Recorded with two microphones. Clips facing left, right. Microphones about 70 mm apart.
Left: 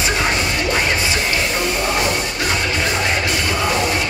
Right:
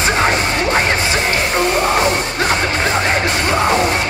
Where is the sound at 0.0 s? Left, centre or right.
Right.